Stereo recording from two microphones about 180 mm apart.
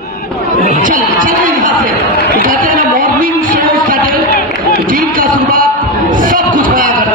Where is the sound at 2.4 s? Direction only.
50° right (ahead or behind).